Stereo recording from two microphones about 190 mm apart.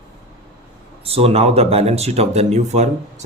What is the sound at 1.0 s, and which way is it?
Speech, 30° right (ahead or behind).